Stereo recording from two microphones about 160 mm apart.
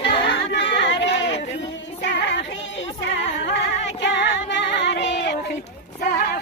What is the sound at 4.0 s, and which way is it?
Music, 90° left.